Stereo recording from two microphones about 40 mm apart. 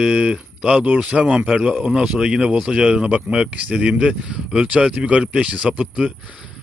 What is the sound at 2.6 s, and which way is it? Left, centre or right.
A man's voice, right.